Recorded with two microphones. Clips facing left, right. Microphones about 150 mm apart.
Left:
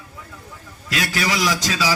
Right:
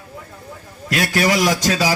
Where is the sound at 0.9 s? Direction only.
50° right (ahead or behind).